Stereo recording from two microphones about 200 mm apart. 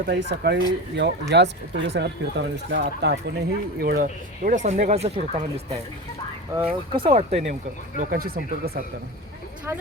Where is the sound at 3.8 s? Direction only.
45° right (ahead or behind); by 5.2 s 30° right (ahead or behind).